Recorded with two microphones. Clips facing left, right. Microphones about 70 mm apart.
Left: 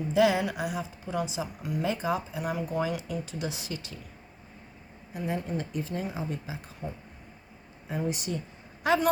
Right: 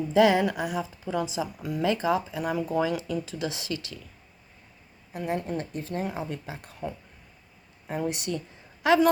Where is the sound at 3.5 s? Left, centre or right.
Right.